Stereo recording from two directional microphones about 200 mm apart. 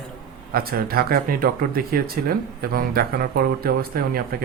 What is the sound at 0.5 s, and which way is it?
Speech, 50° right (ahead or behind).